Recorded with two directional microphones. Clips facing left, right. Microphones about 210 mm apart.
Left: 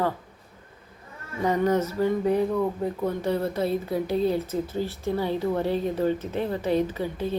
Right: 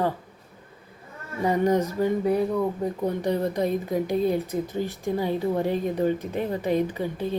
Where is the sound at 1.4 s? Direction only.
10° right (ahead or behind).